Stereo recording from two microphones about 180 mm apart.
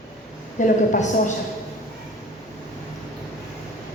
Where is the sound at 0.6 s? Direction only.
40° left (ahead or behind).